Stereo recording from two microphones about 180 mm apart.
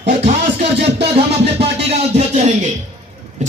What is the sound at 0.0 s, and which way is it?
Music, 35° right (ahead or behind).